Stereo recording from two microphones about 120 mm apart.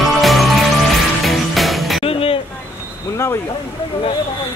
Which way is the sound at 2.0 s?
50° left (ahead or behind).